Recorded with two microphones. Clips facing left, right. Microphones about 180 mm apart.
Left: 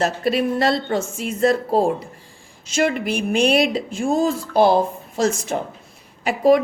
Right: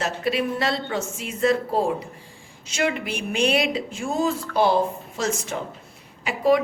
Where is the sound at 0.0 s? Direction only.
40° left (ahead or behind).